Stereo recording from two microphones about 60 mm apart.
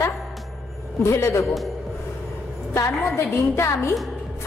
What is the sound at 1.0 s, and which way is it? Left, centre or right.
Speech, left.